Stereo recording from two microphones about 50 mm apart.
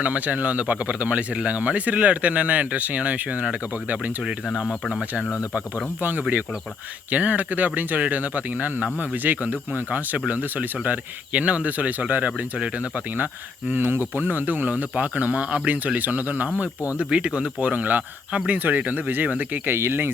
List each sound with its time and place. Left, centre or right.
0.0 s speech: right
4.5 s speech: centre
6.0 s speech: right
12.5 s speech: right
13.1 s speech: right
17.1 s speech: right
18.3 s speech: centre
18.5 s speech: right
19.7 s speech: right